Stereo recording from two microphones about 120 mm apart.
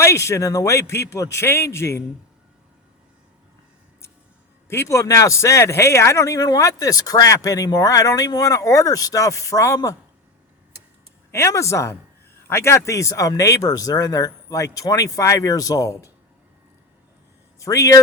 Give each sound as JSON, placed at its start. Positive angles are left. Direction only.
{"t": 0.0, "sound": "speech", "side_deg": 25}
{"t": 4.7, "sound": "speech", "side_deg": 25}
{"t": 11.3, "sound": "speech", "side_deg": 25}
{"t": 17.6, "sound": "a man's voice", "side_deg": 25}